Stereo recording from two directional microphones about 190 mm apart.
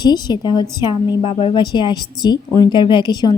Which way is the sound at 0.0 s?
20° left (ahead or behind).